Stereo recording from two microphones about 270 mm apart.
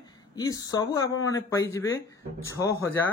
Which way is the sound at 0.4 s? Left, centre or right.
Centre.